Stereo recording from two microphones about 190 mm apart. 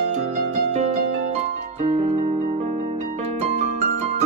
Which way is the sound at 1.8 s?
35° right (ahead or behind).